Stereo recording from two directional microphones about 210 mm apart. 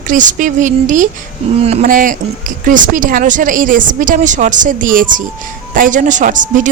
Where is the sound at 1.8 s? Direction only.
40° right (ahead or behind).